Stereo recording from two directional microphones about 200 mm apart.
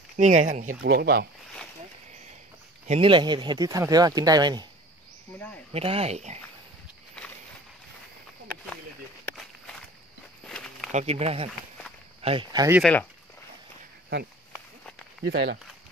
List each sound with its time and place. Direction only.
0.2 s speech: 35° right (ahead or behind)
0.8 s speech: 50° right (ahead or behind)
2.9 s speech: 25° right (ahead or behind)
5.7 s speech: 30° right (ahead or behind)
10.4 s a sound: 5° left (ahead or behind)
10.9 s speech: 35° right (ahead or behind)
15.2 s speech: 55° right (ahead or behind)